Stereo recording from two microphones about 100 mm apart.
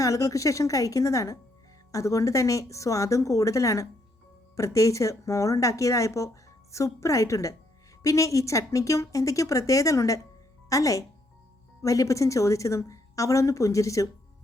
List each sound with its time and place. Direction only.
0.0 s speech: 35° left (ahead or behind)